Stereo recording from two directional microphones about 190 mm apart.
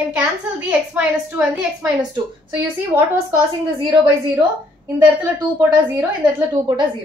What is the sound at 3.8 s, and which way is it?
Speech, 25° right (ahead or behind).